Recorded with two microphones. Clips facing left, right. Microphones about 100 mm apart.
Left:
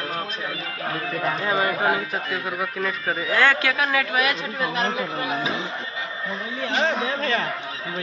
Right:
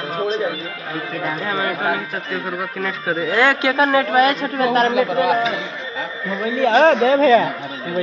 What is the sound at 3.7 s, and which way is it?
Speech, 30° right (ahead or behind).